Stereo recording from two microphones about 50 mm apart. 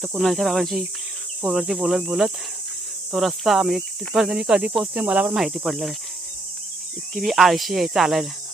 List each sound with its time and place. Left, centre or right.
0.1 s speech: centre
2.0 s cricket: centre
3.1 s speech: centre
4.3 s cricket: centre
4.8 s snake: right
5.3 s cricket: centre
5.6 s speech: centre
7.1 s speech: centre